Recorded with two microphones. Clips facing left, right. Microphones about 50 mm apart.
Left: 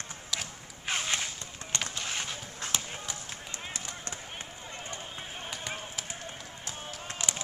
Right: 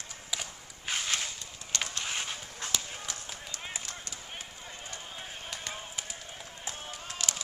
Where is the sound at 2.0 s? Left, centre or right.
Centre.